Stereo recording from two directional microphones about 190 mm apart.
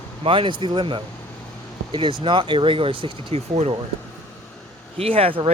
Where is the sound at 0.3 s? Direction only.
25° right (ahead or behind).